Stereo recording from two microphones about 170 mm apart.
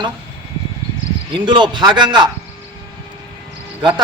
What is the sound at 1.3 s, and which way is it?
Speech, 25° right (ahead or behind).